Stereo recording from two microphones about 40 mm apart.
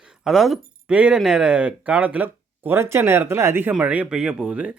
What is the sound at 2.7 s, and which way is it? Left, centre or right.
Speech, right.